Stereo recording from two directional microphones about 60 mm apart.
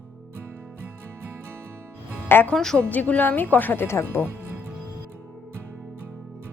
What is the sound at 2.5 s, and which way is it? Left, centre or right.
Speech, centre.